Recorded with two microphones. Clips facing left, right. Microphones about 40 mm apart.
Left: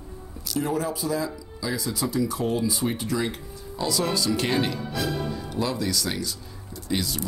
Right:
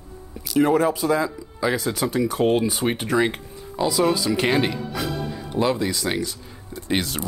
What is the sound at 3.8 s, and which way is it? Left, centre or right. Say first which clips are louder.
Speech: right 5 dB; centre.